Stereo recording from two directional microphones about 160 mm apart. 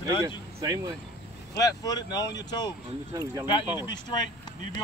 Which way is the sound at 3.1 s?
25° right (ahead or behind).